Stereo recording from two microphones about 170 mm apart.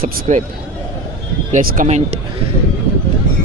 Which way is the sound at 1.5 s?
45° right (ahead or behind).